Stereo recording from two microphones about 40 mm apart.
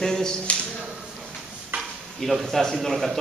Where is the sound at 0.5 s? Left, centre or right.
Left.